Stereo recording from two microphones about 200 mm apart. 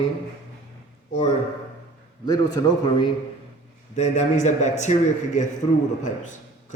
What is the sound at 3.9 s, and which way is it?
A man's voice, 35° left (ahead or behind).